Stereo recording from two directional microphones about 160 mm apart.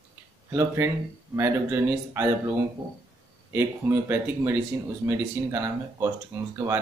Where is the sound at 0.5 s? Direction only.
15° right (ahead or behind).